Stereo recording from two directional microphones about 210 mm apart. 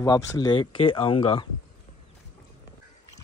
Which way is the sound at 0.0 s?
20° left (ahead or behind).